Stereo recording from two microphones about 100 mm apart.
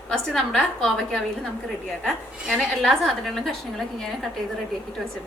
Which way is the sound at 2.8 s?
Centre (ahead or behind).